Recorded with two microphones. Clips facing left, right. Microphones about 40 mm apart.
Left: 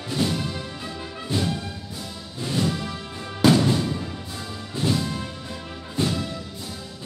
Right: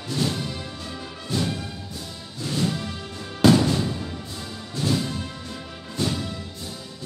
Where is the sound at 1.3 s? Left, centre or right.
Left.